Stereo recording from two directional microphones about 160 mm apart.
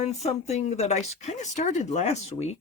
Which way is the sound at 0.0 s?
45° left (ahead or behind).